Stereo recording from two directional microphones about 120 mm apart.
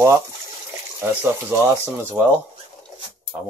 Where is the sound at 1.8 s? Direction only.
20° right (ahead or behind).